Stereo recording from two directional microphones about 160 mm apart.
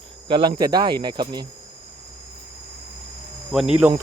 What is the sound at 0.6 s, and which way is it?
Speech, 25° right (ahead or behind).